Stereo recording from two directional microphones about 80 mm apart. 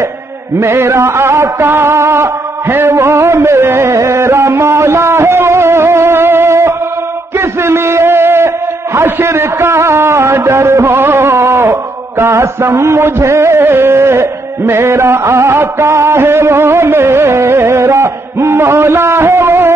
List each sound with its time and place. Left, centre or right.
0.6 s music: right
2.7 s a sound: right
12.2 s music: right